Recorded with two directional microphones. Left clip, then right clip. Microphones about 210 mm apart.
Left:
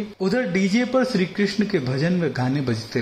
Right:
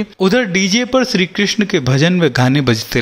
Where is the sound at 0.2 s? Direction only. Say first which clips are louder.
Right 9 dB; 35° right (ahead or behind).